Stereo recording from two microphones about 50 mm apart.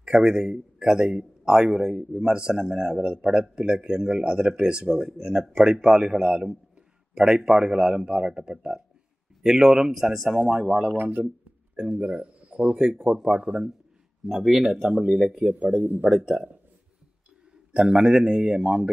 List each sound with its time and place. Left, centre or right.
0.0 s a man's voice: centre
9.4 s a man's voice: centre
10.5 s a man's voice: centre
11.0 s speech: right
11.7 s speech: right
12.7 s a man's voice: centre
15.8 s speech: right
16.3 s a man's voice: centre
17.7 s a man's voice: centre